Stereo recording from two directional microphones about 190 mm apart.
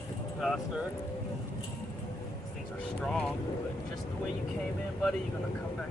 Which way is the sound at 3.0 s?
5° left (ahead or behind).